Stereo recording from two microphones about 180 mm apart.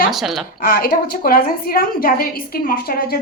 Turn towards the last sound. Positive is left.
turn(degrees=55)  # may be behind; listen again after turning